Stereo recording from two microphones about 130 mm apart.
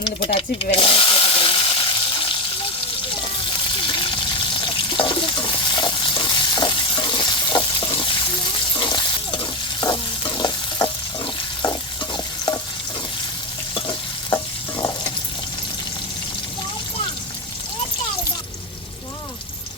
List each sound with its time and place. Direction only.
0.2 s drill: 45° left (ahead or behind)
3.8 s frying: 35° left (ahead or behind)
8.7 s stir: 35° left (ahead or behind)
13.7 s stir: 40° left (ahead or behind)
14.8 s stir: 30° left (ahead or behind)